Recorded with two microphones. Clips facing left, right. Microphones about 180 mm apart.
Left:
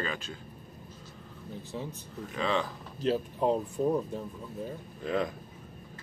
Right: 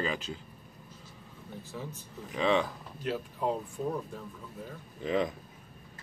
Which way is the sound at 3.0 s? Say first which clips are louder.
Left 5 dB; 25° left (ahead or behind).